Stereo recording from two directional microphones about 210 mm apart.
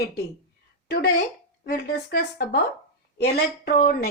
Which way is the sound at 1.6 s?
50° left (ahead or behind).